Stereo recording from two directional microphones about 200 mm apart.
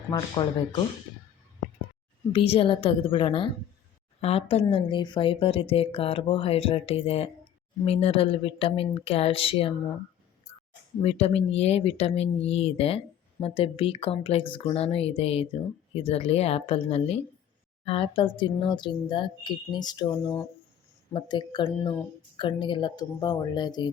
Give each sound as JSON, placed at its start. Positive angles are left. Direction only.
{"t": 0.4, "sound": "a woman's voice", "side_deg": 20}
{"t": 2.3, "sound": "a woman's voice", "side_deg": 30}
{"t": 11.0, "sound": "a woman's voice", "side_deg": 30}